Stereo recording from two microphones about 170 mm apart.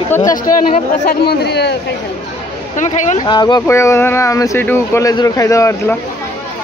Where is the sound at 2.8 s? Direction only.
45° left (ahead or behind).